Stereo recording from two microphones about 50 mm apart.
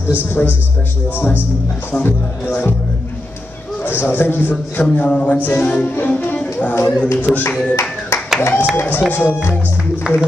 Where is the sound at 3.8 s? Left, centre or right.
Left.